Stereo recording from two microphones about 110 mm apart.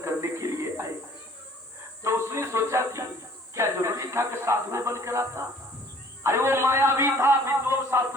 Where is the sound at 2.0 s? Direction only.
25° right (ahead or behind).